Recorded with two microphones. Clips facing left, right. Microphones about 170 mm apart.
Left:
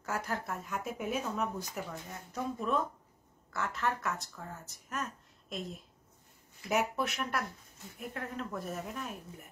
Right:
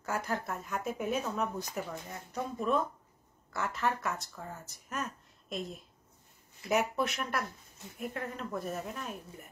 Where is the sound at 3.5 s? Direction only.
5° right (ahead or behind).